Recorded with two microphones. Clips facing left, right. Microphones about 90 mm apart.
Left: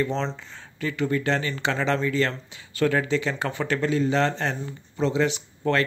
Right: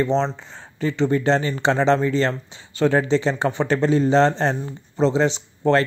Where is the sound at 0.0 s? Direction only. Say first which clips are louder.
Right 6 dB; 25° right (ahead or behind).